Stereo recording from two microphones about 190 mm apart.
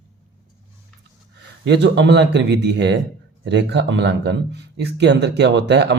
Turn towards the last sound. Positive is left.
turn(degrees=-65)  # may be behind; listen again after turning